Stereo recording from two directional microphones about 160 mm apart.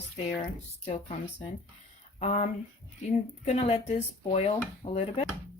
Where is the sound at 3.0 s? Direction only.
45° left (ahead or behind).